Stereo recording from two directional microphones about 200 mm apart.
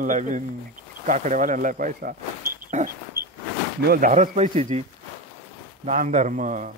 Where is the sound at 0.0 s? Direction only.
40° right (ahead or behind).